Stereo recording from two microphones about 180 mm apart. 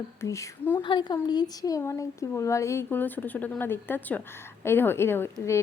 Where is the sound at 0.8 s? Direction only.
25° left (ahead or behind).